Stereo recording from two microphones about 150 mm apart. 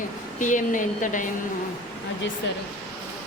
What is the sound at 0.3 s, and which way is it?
Speech, 60° left (ahead or behind).